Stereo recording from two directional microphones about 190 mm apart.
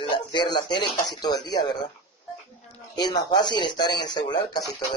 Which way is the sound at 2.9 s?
20° left (ahead or behind).